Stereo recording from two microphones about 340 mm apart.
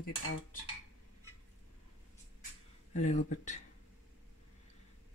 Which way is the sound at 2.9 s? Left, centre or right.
Left.